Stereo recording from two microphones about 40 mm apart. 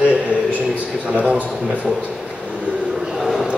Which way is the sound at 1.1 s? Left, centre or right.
Right.